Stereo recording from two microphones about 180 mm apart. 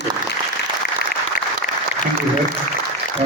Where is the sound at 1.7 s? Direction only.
45° left (ahead or behind).